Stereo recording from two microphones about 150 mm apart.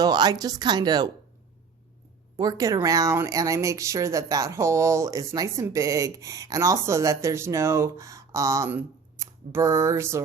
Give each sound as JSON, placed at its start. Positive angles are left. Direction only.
{"t": 0.0, "sound": "speech", "side_deg": -25}
{"t": 2.3, "sound": "speech", "side_deg": -25}